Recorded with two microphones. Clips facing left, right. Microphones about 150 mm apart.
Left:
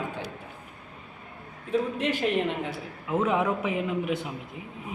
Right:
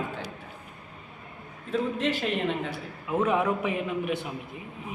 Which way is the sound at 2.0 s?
15° left (ahead or behind).